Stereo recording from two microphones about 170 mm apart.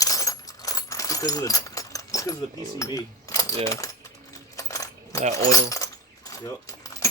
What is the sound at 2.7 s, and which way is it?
Speech, 20° left (ahead or behind).